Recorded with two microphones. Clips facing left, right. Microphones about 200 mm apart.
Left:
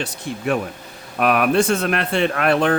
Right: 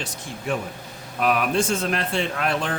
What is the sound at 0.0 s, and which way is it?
Speech, 65° left (ahead or behind).